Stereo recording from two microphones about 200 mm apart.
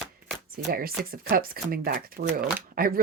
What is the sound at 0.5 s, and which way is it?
Speech, 50° right (ahead or behind).